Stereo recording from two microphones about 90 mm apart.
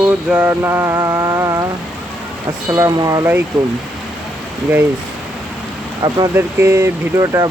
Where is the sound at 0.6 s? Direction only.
25° right (ahead or behind).